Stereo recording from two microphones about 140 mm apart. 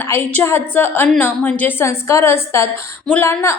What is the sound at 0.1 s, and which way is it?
A woman's voice, 15° left (ahead or behind).